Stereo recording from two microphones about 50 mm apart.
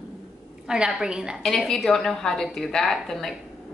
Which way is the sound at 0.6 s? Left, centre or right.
Centre.